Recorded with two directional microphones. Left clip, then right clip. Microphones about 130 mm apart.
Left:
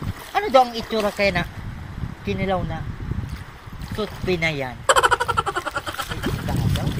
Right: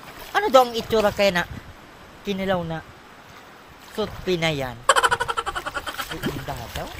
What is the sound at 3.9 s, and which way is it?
Speech, 30° right (ahead or behind).